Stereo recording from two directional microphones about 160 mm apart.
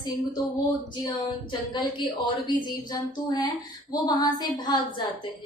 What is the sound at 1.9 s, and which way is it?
Speech, 30° left (ahead or behind).